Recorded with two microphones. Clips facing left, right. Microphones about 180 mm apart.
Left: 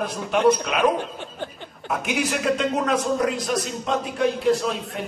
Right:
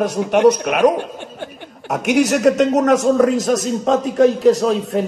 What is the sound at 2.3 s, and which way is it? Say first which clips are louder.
Speech: right 9 dB; 45° right (ahead or behind).